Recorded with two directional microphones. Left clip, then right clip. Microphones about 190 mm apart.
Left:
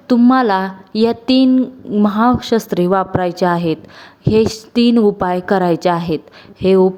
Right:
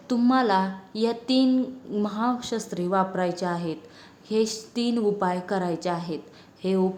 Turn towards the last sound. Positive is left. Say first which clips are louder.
# left 14 dB
turn(degrees=40)  # may be behind; listen again after turning